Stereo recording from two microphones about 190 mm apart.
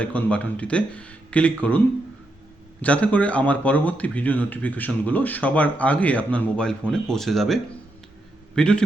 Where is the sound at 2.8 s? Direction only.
5° left (ahead or behind).